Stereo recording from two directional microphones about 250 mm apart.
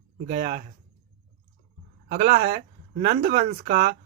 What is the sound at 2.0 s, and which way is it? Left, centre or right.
Speech, right.